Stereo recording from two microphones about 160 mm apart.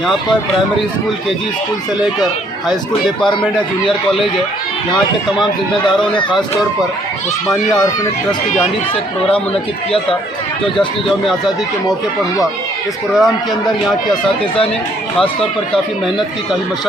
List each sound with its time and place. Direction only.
10.8 s a man's voice: centre (ahead or behind)
13.1 s a man's voice: centre (ahead or behind)
14.1 s speech: 35° left (ahead or behind)